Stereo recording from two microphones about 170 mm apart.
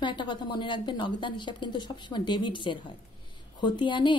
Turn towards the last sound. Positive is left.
turn(degrees=30)  # may be behind; listen again after turning